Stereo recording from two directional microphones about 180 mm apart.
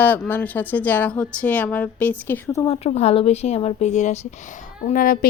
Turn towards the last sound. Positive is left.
turn(degrees=55)  # may be behind; listen again after turning